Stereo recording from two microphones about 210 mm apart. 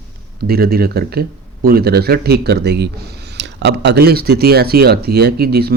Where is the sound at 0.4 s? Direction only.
45° right (ahead or behind).